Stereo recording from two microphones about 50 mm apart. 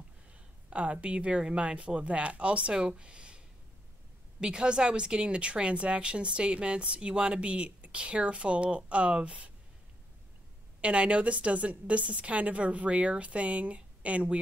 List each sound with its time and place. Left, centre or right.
0.3 s a sound: right
1.0 s speech: right
10.8 s speech: right